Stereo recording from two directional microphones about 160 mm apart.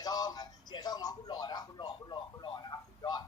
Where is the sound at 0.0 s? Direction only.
25° left (ahead or behind).